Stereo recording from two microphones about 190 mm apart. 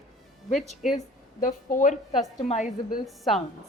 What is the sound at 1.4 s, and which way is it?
Speech, 45° left (ahead or behind).